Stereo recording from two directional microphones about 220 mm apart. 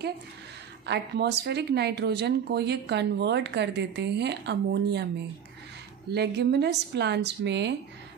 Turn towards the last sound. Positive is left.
turn(degrees=-50)  # may be behind; listen again after turning